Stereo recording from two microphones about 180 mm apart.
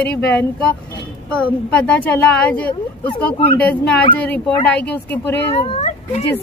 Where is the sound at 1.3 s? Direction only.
5° left (ahead or behind).